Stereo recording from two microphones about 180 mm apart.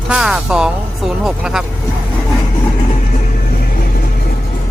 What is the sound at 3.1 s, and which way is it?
Music, 55° left (ahead or behind).